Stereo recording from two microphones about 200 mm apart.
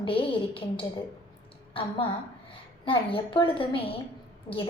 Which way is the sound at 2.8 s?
25° left (ahead or behind).